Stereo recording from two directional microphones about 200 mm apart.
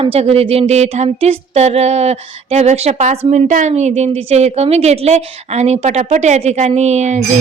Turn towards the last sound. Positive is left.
turn(degrees=-35)  # may be behind; listen again after turning